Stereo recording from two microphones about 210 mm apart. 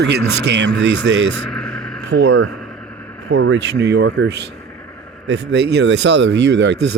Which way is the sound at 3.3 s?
60° right (ahead or behind).